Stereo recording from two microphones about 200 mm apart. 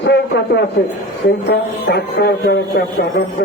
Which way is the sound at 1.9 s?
55° left (ahead or behind).